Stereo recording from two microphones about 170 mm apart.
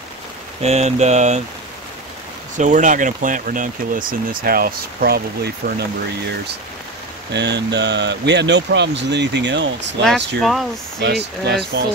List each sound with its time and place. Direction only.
0.6 s speech: 40° right (ahead or behind)
2.5 s speech: 45° right (ahead or behind); by 5.9 s 70° right (ahead or behind)
7.3 s speech: 90° right
10.4 s speech: centre (ahead or behind)
11.0 s speech: 85° right